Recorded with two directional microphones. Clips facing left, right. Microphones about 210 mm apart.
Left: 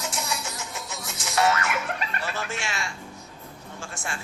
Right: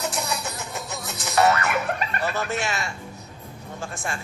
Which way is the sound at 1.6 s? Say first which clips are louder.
Right 4 dB; 40° right (ahead or behind).